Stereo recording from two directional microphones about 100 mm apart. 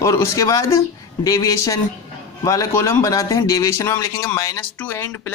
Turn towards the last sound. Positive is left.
turn(degrees=20)  # may be behind; listen again after turning